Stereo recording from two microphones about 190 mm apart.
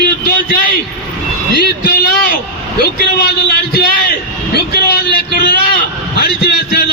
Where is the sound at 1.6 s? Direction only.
55° left (ahead or behind).